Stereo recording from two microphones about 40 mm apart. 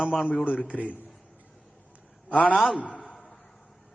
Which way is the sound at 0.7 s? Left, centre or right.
Right.